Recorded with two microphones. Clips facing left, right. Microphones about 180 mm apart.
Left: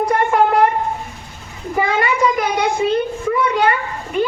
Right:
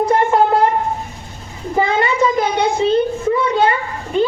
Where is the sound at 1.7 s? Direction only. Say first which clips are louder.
Right 2 dB; 25° right (ahead or behind).